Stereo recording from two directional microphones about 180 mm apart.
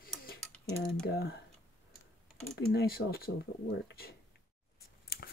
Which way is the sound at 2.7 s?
60° left (ahead or behind).